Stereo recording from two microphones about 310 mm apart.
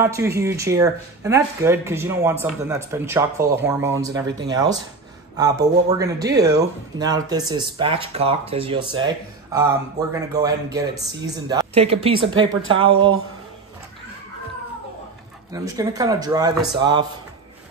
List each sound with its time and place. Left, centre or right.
0.0 s speech: centre
15.5 s speech: centre